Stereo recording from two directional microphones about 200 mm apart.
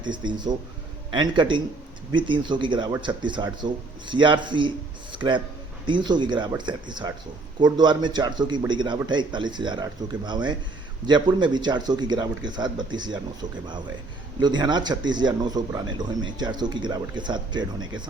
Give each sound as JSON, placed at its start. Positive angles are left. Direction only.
{"t": 0.0, "sound": "speech", "side_deg": -20}